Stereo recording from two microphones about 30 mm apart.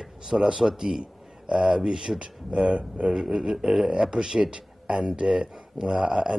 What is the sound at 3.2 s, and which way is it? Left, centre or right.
Speech, right.